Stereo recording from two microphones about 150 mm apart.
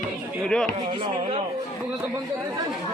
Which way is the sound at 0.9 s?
35° right (ahead or behind).